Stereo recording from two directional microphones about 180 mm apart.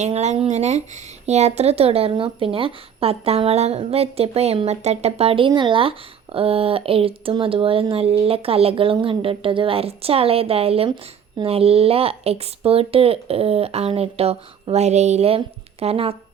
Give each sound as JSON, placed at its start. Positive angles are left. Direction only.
{"t": 0.0, "sound": "speech", "side_deg": -40}